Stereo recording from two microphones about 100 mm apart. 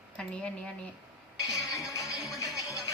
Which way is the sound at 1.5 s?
35° left (ahead or behind).